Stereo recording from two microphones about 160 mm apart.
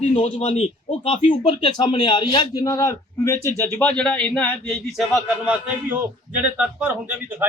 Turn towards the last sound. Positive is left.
turn(degrees=-10)  # may be behind; listen again after turning